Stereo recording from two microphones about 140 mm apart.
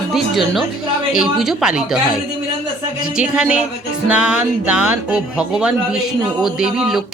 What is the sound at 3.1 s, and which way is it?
Speech, 5° right (ahead or behind).